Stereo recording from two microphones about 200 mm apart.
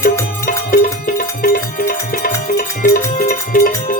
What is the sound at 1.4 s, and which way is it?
Music, 45° left (ahead or behind).